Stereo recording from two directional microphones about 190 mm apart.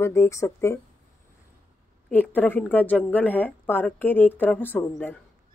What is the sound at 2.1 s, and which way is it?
Speech, 10° left (ahead or behind).